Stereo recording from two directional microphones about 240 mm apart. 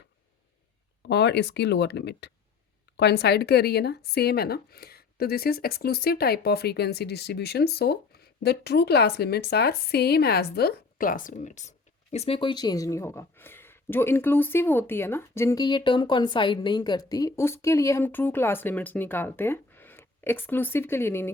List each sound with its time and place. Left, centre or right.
1.0 s speech: left; by 21.3 s centre